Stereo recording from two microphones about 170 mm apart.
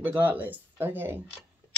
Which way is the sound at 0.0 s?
10° right (ahead or behind).